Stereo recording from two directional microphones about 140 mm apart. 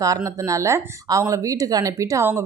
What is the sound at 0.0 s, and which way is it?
Speech, 25° right (ahead or behind).